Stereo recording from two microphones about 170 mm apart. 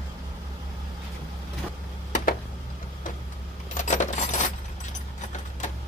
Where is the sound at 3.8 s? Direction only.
45° left (ahead or behind).